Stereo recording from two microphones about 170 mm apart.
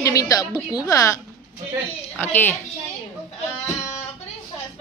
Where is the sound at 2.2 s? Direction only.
10° left (ahead or behind).